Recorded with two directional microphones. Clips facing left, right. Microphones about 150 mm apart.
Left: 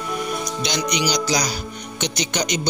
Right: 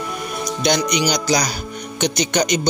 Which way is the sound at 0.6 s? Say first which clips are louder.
Right 6 dB; 55° right (ahead or behind).